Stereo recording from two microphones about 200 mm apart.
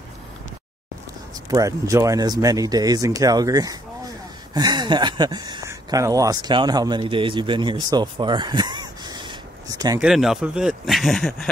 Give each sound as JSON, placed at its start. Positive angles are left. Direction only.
{"t": 1.5, "sound": "speech", "side_deg": -15}
{"t": 9.9, "sound": "speech", "side_deg": 0}